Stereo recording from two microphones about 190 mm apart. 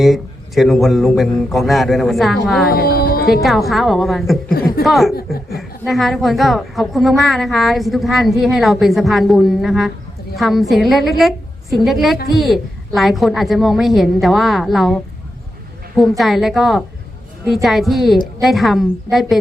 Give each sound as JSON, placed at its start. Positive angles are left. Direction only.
{"t": 0.0, "sound": "a woman's voice", "side_deg": 0}
{"t": 2.7, "sound": "speech", "side_deg": 55}
{"t": 3.7, "sound": "a woman's voice", "side_deg": 0}
{"t": 5.1, "sound": "speech", "side_deg": 55}
{"t": 5.5, "sound": "a woman's voice", "side_deg": 0}